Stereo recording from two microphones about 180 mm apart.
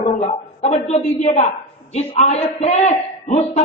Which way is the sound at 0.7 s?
35° left (ahead or behind).